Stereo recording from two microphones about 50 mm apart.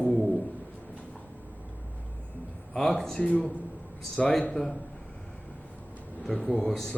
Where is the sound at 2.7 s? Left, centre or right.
Centre.